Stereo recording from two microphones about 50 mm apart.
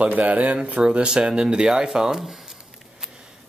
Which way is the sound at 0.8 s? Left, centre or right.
Centre.